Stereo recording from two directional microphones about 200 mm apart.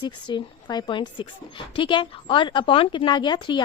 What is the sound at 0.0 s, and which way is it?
A woman's voice, 25° left (ahead or behind).